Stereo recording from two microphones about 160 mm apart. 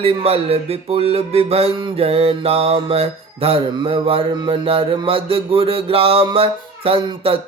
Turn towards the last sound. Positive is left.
turn(degrees=-30)  # may be behind; listen again after turning